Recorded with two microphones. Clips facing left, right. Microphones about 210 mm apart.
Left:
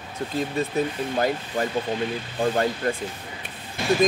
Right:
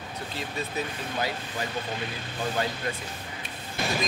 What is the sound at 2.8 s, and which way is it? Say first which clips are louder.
Speech: left 7 dB; 50° left (ahead or behind).